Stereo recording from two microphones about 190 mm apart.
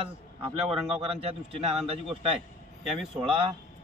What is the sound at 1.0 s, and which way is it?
Speech, 30° right (ahead or behind).